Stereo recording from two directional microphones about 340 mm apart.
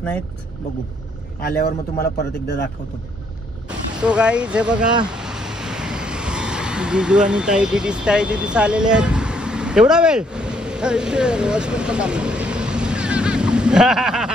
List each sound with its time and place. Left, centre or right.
1.4 s speech: left
3.6 s speech: centre
5.0 s vehicle: centre